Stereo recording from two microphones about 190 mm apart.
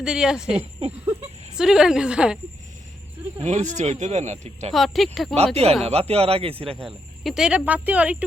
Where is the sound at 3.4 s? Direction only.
35° right (ahead or behind).